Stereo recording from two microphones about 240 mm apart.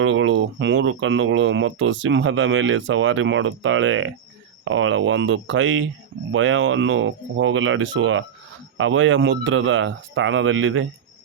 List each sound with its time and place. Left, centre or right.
0.0 s speech: right